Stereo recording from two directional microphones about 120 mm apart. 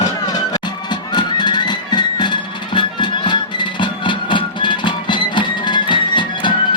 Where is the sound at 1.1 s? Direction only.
40° left (ahead or behind).